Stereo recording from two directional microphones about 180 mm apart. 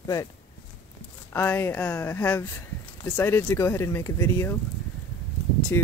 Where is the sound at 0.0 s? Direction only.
20° left (ahead or behind).